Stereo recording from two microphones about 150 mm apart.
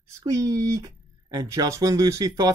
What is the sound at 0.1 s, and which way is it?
Speech, 20° right (ahead or behind).